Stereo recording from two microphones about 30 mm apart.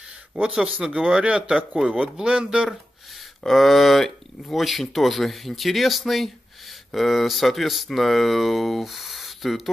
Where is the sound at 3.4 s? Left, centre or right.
Centre.